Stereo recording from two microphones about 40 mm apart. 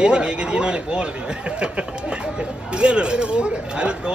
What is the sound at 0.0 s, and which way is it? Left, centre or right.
Speech, right.